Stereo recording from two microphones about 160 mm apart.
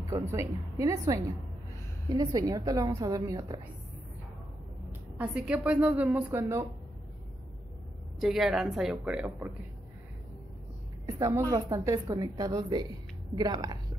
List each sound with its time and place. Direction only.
0.1 s a woman's voice: 20° right (ahead or behind)
5.1 s a woman's voice: 10° right (ahead or behind)
8.2 s speech: centre (ahead or behind)
11.1 s a woman's voice: 20° right (ahead or behind)